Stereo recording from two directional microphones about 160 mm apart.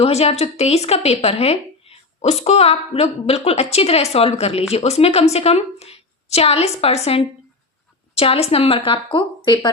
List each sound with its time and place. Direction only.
0.0 s a woman's voice: 40° left (ahead or behind)